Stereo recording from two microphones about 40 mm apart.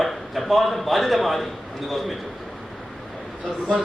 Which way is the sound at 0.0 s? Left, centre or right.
Centre.